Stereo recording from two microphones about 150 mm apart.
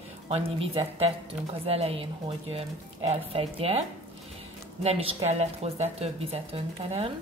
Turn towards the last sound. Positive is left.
turn(degrees=-40)  # may be behind; listen again after turning